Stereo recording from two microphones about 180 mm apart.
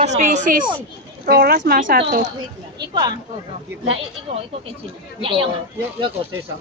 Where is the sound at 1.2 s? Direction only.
60° right (ahead or behind).